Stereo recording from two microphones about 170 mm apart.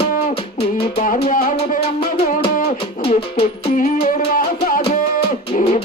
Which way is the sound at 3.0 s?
35° left (ahead or behind).